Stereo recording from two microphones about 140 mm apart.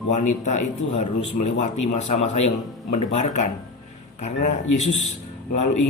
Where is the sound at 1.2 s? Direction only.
50° left (ahead or behind).